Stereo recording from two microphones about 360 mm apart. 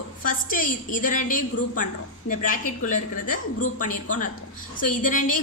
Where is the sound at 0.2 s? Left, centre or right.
Left.